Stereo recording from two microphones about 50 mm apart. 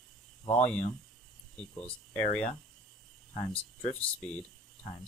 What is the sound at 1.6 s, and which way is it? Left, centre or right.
Speech, left.